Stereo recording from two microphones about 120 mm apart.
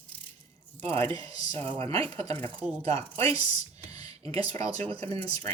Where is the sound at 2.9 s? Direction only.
25° left (ahead or behind).